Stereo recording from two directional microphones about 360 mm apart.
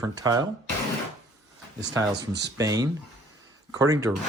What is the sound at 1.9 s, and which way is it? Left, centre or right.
Speech, centre.